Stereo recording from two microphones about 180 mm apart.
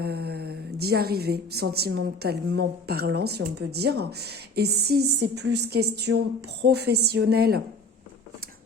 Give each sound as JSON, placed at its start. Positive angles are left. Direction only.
{"t": 0.0, "sound": "a woman's voice", "side_deg": -60}